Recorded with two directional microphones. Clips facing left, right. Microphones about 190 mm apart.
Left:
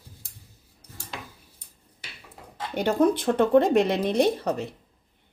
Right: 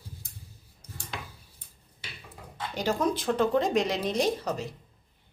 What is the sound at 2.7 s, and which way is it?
A woman's voice, 60° left (ahead or behind).